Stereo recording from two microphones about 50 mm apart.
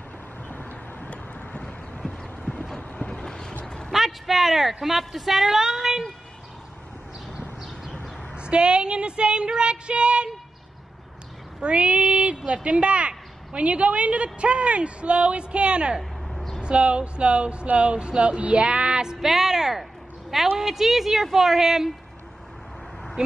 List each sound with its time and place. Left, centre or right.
0.5 s vehicle: left
2.0 s clip-clop: centre
3.0 s vehicle: centre
3.6 s a sound: centre
3.9 s a woman's voice: centre
8.4 s a woman's voice: centre
11.6 s child singing: right
12.6 s a woman's voice: right
16.0 s a sound: centre
16.6 s a woman's voice: right
19.1 s a woman's voice: centre